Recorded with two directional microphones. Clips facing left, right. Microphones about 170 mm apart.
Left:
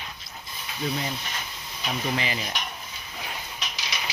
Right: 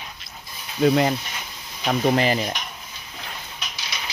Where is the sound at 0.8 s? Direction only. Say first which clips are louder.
Right 12 dB; 75° right (ahead or behind).